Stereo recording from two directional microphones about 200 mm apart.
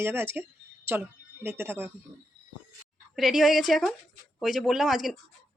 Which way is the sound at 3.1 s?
Centre (ahead or behind).